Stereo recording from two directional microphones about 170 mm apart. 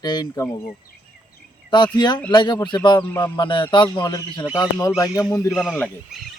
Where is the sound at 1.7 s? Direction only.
25° left (ahead or behind).